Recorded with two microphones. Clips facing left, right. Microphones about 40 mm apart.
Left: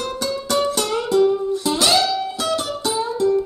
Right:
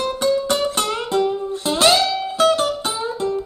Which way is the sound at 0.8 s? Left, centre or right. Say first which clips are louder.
Left 3 dB; right.